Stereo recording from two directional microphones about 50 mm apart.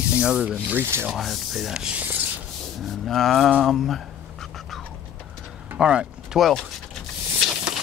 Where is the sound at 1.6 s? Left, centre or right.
Centre.